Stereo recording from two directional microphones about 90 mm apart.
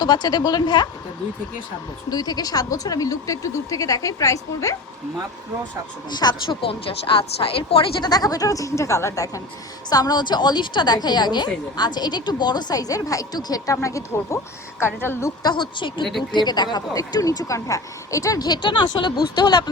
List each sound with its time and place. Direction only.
0.0 s a woman's voice: 50° left (ahead or behind)
2.0 s speech: 50° left (ahead or behind)
6.1 s speech: 55° left (ahead or behind); by 7.9 s 85° left
8.0 s a woman's voice: 45° left (ahead or behind); by 15.3 s 25° left (ahead or behind)
15.4 s a woman's voice: 55° left (ahead or behind); by 18.4 s 40° left (ahead or behind)
18.4 s speech: 55° left (ahead or behind)